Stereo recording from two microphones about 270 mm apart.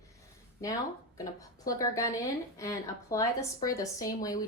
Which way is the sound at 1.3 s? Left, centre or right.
Centre.